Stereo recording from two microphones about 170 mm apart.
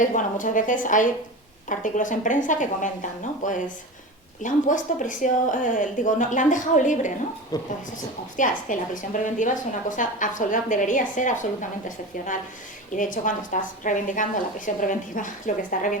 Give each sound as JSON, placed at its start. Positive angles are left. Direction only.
{"t": 0.0, "sound": "a woman's voice", "side_deg": 50}
{"t": 7.5, "sound": "speech", "side_deg": 20}
{"t": 8.4, "sound": "a woman's voice", "side_deg": 50}
{"t": 13.0, "sound": "a woman's voice", "side_deg": 50}